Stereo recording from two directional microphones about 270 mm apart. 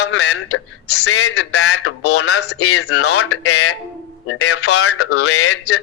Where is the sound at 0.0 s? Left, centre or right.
Left.